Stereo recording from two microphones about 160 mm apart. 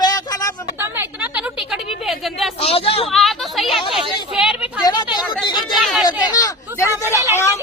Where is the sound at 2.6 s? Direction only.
35° left (ahead or behind).